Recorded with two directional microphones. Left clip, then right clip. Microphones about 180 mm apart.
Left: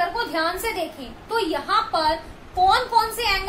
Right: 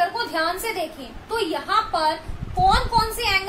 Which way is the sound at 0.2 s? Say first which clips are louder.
Even; 10° left (ahead or behind).